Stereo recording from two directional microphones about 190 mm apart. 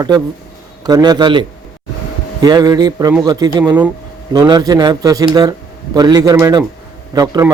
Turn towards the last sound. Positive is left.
turn(degrees=-20)  # may be behind; listen again after turning